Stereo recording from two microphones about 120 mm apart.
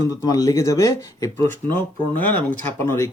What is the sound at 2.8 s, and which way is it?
Speech, 20° left (ahead or behind).